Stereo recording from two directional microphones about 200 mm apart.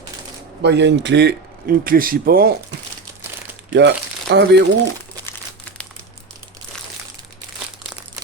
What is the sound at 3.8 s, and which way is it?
Speech, 55° right (ahead or behind).